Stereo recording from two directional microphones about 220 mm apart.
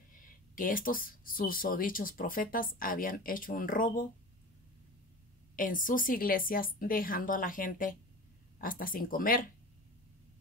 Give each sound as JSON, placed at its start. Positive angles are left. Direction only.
{"t": 0.6, "sound": "speech", "side_deg": 40}
{"t": 5.6, "sound": "speech", "side_deg": 40}